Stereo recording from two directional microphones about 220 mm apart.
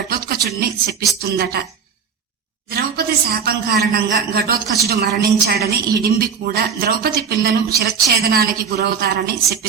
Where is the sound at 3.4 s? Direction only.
45° right (ahead or behind).